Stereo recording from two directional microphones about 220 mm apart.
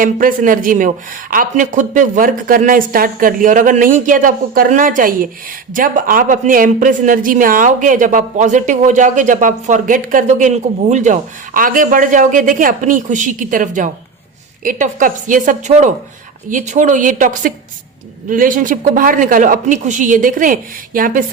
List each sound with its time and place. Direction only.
0.0 s a man's voice: 40° right (ahead or behind)